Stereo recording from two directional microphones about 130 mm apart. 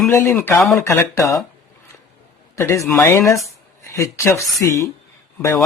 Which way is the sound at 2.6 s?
20° left (ahead or behind).